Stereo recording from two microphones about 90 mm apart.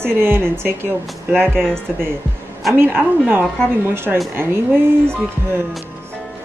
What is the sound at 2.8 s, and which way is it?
A woman's voice, 20° right (ahead or behind).